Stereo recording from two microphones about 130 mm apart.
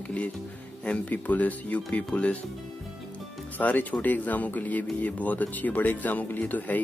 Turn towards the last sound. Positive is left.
turn(degrees=15)  # may be behind; listen again after turning